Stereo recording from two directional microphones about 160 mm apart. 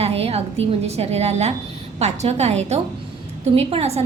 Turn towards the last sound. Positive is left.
turn(degrees=-40)  # may be behind; listen again after turning